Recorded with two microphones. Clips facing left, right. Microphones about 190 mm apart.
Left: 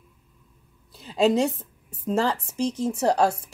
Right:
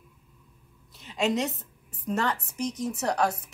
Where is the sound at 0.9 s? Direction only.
35° left (ahead or behind).